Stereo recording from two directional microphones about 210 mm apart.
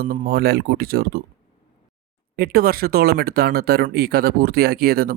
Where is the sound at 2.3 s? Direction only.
45° right (ahead or behind).